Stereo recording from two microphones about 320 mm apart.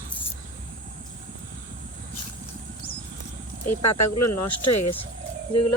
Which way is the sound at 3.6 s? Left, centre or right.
Left.